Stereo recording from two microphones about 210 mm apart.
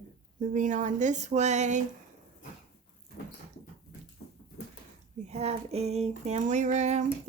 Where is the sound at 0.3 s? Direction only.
40° right (ahead or behind).